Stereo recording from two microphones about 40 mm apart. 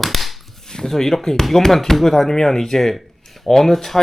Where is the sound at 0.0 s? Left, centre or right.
Centre.